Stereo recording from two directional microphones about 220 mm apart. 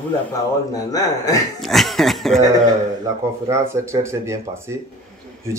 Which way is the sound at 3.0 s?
15° right (ahead or behind).